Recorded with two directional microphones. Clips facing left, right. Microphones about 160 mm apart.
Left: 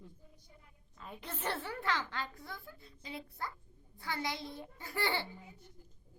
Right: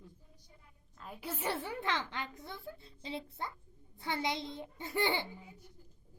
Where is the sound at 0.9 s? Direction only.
5° right (ahead or behind).